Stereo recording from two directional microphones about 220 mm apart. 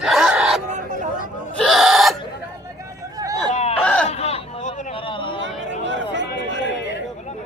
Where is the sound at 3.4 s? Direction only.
30° left (ahead or behind).